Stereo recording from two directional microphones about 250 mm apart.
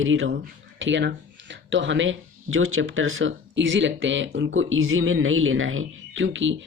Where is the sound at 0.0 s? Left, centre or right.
Right.